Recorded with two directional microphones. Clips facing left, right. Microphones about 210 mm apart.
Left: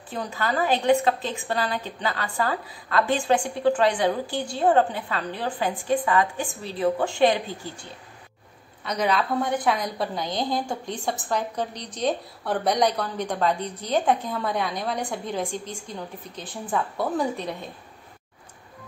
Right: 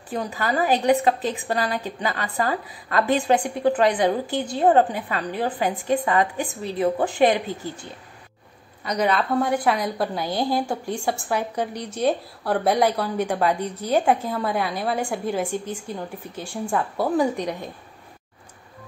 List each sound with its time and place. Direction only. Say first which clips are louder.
0.1 s a woman's voice: right 2 dB; 15° right (ahead or behind)
8.8 s a woman's voice: right 2 dB; 5° right (ahead or behind)